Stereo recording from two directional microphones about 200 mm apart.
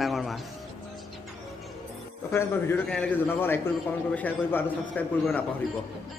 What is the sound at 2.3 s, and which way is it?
A man's voice, 10° left (ahead or behind).